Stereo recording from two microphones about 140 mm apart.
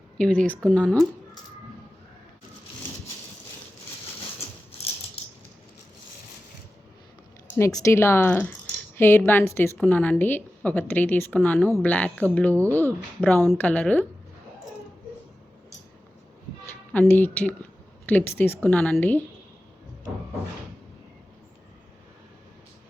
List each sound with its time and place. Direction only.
0.2 s a woman's voice: 10° left (ahead or behind)
7.6 s a woman's voice: 20° left (ahead or behind)
16.6 s a woman's voice: 15° left (ahead or behind)